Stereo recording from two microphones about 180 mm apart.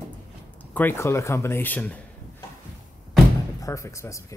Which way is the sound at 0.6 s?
10° left (ahead or behind).